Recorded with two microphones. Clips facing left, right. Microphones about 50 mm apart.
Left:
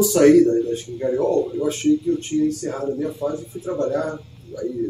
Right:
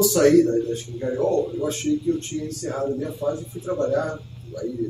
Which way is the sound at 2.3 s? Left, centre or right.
Left.